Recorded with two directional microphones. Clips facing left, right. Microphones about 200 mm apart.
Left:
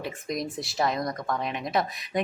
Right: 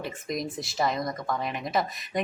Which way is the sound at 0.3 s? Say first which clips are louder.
Even; centre (ahead or behind).